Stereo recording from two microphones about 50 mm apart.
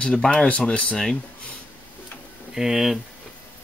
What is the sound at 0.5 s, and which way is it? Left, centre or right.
Speech, left.